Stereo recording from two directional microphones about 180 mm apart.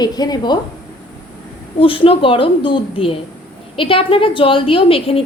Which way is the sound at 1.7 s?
30° left (ahead or behind).